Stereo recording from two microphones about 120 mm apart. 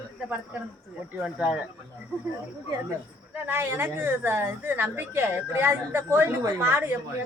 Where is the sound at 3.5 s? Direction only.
20° right (ahead or behind).